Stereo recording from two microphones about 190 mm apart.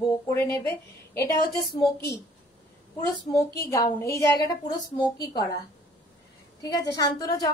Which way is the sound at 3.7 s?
15° left (ahead or behind).